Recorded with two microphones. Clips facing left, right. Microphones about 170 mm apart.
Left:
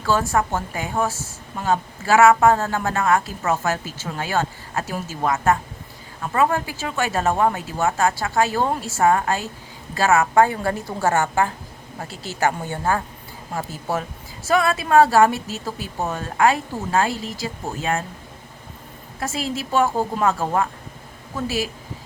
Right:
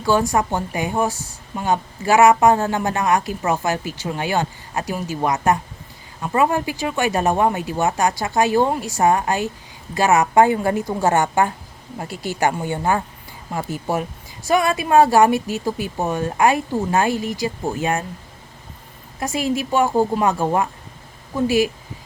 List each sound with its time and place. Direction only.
0.0 s a woman's voice: 15° right (ahead or behind)
19.2 s a woman's voice: 15° right (ahead or behind)